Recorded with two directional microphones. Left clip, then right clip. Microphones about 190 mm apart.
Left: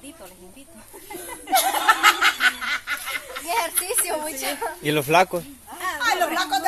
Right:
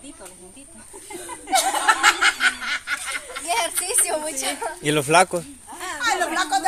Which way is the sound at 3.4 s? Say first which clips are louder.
Right 1 dB; 25° right (ahead or behind).